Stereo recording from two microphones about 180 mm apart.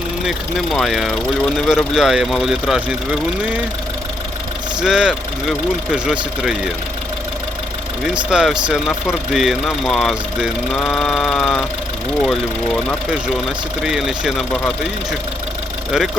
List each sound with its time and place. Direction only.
0.3 s speech: centre (ahead or behind)
4.8 s speech: 5° right (ahead or behind)
8.0 s speech: 5° right (ahead or behind)